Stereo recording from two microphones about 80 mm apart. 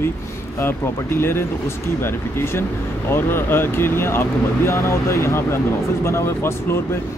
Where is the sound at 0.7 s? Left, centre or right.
Left.